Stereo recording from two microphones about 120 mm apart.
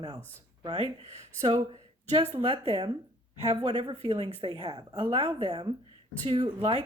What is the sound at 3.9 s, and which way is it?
Speech, 50° right (ahead or behind).